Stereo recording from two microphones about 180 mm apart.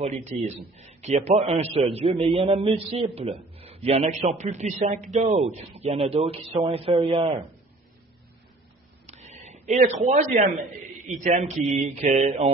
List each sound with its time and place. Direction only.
0.0 s a man's voice: 40° right (ahead or behind)
9.0 s a sound: 40° right (ahead or behind)
11.2 s a man's voice: 40° right (ahead or behind)